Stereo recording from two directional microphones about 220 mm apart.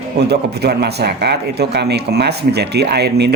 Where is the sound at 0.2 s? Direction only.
50° right (ahead or behind).